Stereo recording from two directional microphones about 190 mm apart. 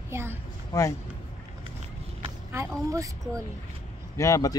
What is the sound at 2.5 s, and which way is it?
Speech, 15° right (ahead or behind).